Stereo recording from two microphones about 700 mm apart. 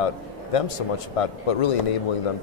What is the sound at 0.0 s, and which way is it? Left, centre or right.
Speech, left.